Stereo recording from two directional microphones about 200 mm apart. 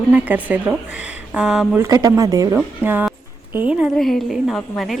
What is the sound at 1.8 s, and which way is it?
A woman's voice, 15° right (ahead or behind).